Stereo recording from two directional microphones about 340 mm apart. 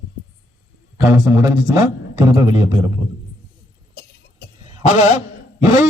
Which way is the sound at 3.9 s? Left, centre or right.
Left.